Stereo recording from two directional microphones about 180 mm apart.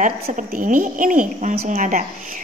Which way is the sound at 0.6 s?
45° right (ahead or behind).